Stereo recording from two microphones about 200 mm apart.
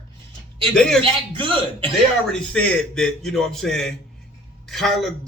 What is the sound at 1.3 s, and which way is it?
Speech, 25° right (ahead or behind).